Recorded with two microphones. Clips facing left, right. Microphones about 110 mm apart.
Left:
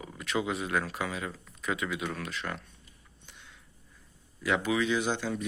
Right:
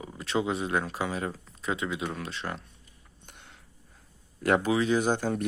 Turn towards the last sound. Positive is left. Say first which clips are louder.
# right 4 dB
turn(degrees=-45)  # may be behind; listen again after turning